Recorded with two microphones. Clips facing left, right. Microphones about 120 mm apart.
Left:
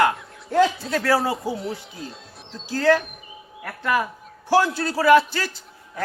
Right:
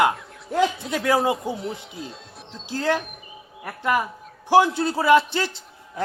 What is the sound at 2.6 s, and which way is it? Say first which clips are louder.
A man's voice: left 5 dB; 20° right (ahead or behind).